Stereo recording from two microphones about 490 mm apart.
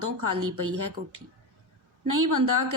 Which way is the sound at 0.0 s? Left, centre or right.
Right.